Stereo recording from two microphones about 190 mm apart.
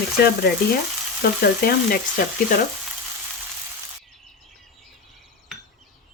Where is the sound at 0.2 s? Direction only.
55° left (ahead or behind).